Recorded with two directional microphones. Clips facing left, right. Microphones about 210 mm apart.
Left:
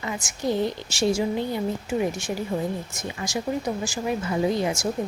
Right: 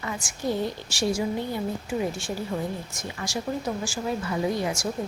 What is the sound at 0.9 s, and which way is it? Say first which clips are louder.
A woman's voice: left 2 dB; 25° left (ahead or behind).